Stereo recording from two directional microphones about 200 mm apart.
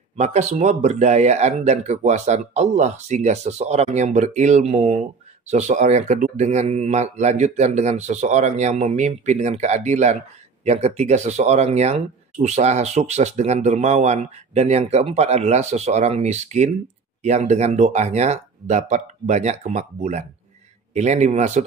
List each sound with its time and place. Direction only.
0.2 s speech: 35° right (ahead or behind)